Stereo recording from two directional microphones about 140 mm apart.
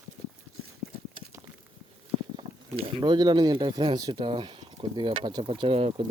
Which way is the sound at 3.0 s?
30° right (ahead or behind).